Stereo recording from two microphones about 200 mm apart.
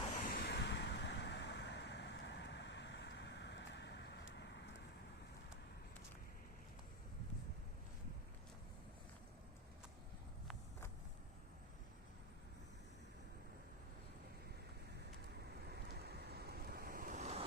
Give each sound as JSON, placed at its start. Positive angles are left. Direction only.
{"t": 0.3, "sound": "vehicle", "side_deg": 55}
{"t": 15.7, "sound": "waves", "side_deg": -55}